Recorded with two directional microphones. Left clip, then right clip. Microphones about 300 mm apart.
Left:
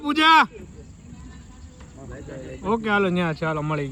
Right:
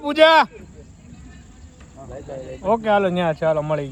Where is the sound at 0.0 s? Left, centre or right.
Centre.